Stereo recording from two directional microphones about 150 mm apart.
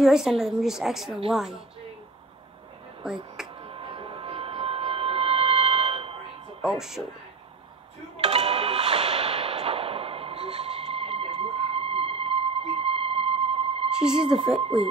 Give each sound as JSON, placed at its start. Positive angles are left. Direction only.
{"t": 0.0, "sound": "a woman's voice", "side_deg": 0}
{"t": 3.6, "sound": "music", "side_deg": -35}
{"t": 6.6, "sound": "a woman's voice", "side_deg": -5}
{"t": 8.2, "sound": "music", "side_deg": -40}
{"t": 13.8, "sound": "a woman's voice", "side_deg": -5}
{"t": 14.6, "sound": "speech", "side_deg": -40}